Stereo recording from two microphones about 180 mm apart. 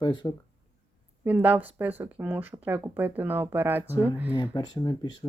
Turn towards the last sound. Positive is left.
turn(degrees=25)  # may be behind; listen again after turning